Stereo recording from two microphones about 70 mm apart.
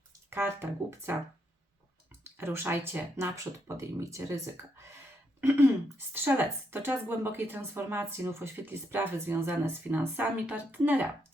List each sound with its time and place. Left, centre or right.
0.3 s speech: right
2.4 s speech: right
6.2 s speech: right